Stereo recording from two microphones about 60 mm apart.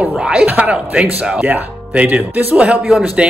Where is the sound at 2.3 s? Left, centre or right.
Right.